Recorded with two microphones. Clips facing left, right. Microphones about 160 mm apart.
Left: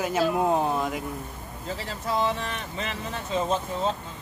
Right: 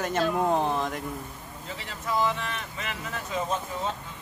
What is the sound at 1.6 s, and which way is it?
Speech, 35° left (ahead or behind).